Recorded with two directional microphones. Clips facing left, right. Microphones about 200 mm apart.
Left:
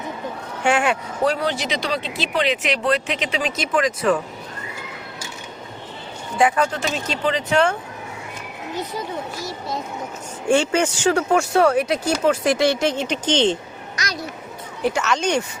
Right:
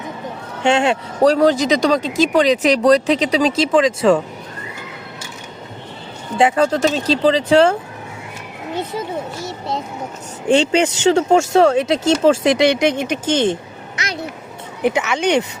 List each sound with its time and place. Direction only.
0.6 s speech: 25° right (ahead or behind)
1.2 s speech: 40° right (ahead or behind)
6.3 s speech: 30° right (ahead or behind)
9.4 s a sound: 25° right (ahead or behind)
10.5 s speech: 20° right (ahead or behind)
14.8 s speech: 20° right (ahead or behind)